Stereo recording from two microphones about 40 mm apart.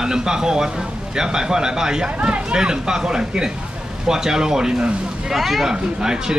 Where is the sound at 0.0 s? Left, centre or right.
Centre.